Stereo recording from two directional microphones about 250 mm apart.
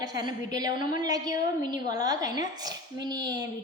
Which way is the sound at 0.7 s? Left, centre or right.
Left.